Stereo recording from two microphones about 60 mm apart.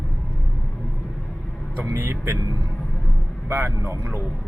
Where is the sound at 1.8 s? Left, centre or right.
Right.